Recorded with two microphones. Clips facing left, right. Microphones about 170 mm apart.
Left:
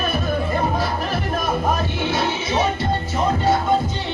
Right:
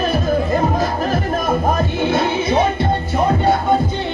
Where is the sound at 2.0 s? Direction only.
50° right (ahead or behind).